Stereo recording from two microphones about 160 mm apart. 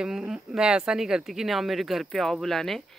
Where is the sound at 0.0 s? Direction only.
5° right (ahead or behind).